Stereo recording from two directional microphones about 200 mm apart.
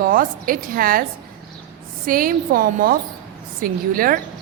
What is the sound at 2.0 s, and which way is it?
A woman's voice, 45° right (ahead or behind).